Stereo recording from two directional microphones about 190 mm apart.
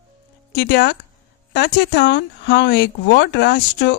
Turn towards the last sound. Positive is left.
turn(degrees=65)  # may be behind; listen again after turning